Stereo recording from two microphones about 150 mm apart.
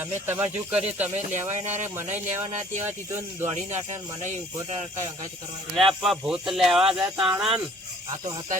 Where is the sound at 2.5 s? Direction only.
55° right (ahead or behind).